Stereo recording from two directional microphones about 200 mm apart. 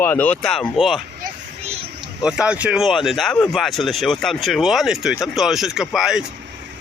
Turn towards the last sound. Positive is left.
turn(degrees=-5)  # may be behind; listen again after turning